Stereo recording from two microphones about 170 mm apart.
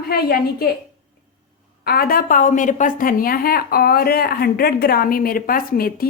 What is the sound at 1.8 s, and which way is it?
A woman's voice, 60° left (ahead or behind).